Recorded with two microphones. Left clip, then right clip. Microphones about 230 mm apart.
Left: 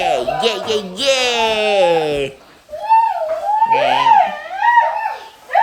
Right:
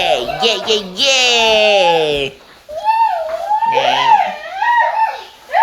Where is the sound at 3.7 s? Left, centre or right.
Centre.